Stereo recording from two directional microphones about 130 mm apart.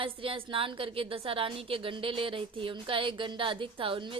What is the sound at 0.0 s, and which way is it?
A woman's voice, 45° right (ahead or behind).